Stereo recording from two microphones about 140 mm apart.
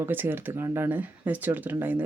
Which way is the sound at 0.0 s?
15° right (ahead or behind).